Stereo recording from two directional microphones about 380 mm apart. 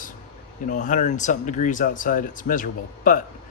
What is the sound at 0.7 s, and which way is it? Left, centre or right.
Speech, centre.